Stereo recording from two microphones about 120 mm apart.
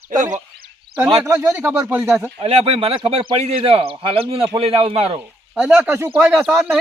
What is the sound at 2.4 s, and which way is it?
Speech, 60° right (ahead or behind).